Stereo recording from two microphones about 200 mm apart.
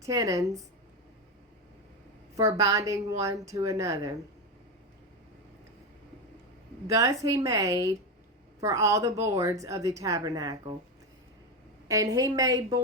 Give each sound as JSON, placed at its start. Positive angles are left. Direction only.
{"t": 0.0, "sound": "a woman's voice", "side_deg": -15}
{"t": 2.3, "sound": "a woman's voice", "side_deg": -15}
{"t": 6.8, "sound": "a woman's voice", "side_deg": -15}
{"t": 11.9, "sound": "a woman's voice", "side_deg": -15}